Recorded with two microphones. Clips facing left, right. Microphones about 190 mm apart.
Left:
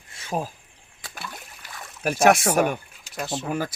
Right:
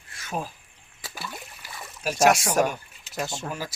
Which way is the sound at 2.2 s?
55° left (ahead or behind).